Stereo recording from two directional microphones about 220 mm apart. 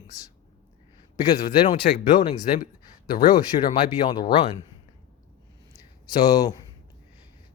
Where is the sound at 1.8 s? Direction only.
40° left (ahead or behind).